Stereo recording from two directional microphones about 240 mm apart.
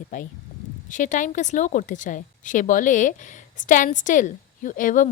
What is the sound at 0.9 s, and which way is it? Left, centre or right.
A woman's voice, left.